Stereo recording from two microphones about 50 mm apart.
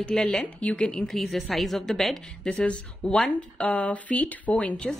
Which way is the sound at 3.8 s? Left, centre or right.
Left.